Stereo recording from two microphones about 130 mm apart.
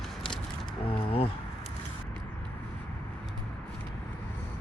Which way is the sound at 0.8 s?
45° left (ahead or behind).